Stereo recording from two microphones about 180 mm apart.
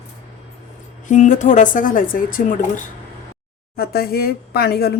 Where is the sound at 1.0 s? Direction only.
45° left (ahead or behind).